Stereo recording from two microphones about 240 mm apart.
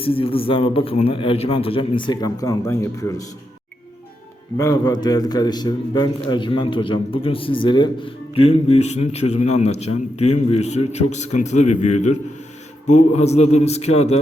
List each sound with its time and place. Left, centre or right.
0.0 s a man's voice: left
4.5 s a man's voice: centre